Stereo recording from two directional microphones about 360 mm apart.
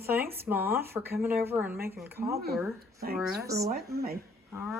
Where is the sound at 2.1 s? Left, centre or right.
Right.